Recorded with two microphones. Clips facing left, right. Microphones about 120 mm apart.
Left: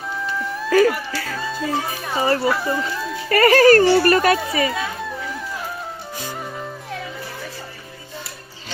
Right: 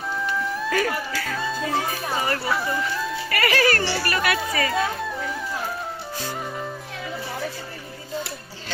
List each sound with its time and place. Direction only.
0.1 s music: centre (ahead or behind)
0.7 s speech: 35° left (ahead or behind)
1.4 s music: centre (ahead or behind)
2.1 s speech: 30° left (ahead or behind)
2.5 s speech: centre (ahead or behind)
3.2 s speech: 40° left (ahead or behind)
4.7 s music: centre (ahead or behind)